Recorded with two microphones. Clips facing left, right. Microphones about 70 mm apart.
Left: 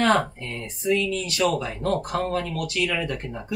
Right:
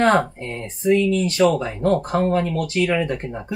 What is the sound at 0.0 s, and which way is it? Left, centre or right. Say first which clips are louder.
A woman's voice: right 4 dB; right.